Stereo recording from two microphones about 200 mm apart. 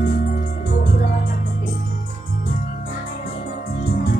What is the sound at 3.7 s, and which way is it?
Music, 45° left (ahead or behind).